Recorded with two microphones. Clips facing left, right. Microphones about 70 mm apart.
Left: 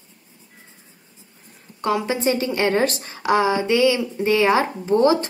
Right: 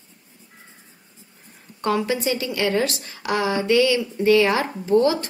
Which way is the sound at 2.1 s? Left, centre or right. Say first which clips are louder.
Left 3 dB; left.